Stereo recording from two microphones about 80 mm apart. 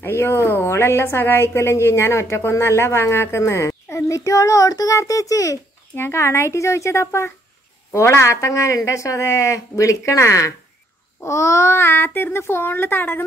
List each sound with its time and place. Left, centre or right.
0.0 s a woman's voice: left
5.9 s a woman's voice: left